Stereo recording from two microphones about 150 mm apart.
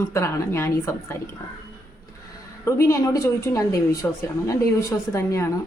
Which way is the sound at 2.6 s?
20° left (ahead or behind).